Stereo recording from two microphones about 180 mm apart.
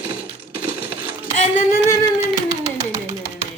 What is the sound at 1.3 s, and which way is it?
Singing, 45° left (ahead or behind).